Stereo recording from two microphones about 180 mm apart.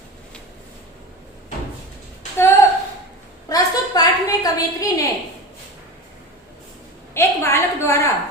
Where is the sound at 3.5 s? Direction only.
20° left (ahead or behind).